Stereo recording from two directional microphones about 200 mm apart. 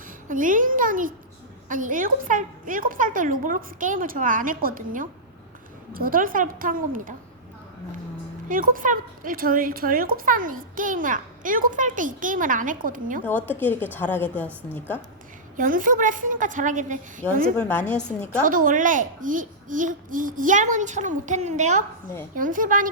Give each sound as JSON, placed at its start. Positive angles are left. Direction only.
{"t": 0.3, "sound": "a child's voice", "side_deg": -40}
{"t": 8.4, "sound": "speech", "side_deg": -45}
{"t": 13.2, "sound": "a woman's voice", "side_deg": 10}
{"t": 15.5, "sound": "a child's voice", "side_deg": -40}
{"t": 17.6, "sound": "a woman's voice", "side_deg": 5}
{"t": 18.4, "sound": "a child's voice", "side_deg": -40}